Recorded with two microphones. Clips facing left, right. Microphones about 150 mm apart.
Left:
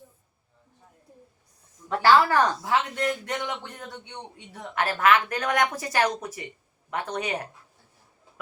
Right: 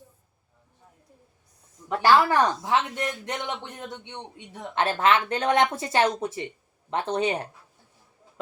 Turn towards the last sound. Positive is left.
turn(degrees=-25)  # may be behind; listen again after turning